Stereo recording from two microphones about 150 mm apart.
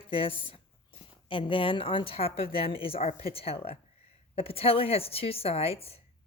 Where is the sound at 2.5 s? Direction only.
90° left.